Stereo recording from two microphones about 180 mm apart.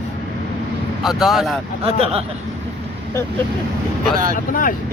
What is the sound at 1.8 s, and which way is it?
Speech, 30° right (ahead or behind).